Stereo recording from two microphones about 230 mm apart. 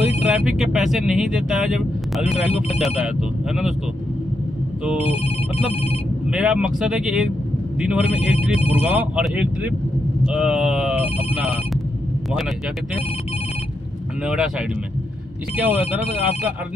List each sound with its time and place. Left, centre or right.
0.3 s speech: centre
2.2 s speech: left
2.8 s speech: centre
5.0 s speech: left
6.3 s speech: centre
8.1 s speech: left
8.8 s speech: centre
11.0 s speech: left
14.2 s speech: centre
15.7 s speech: left